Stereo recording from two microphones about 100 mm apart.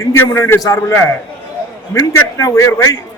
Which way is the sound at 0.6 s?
35° left (ahead or behind).